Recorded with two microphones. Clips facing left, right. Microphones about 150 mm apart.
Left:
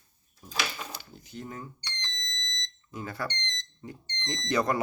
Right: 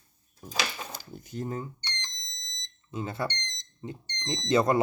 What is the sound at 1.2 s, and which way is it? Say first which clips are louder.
Speech: right 7 dB; 40° right (ahead or behind).